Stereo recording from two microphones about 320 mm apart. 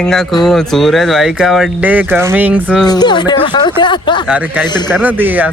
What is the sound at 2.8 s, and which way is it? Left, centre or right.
Speech, centre.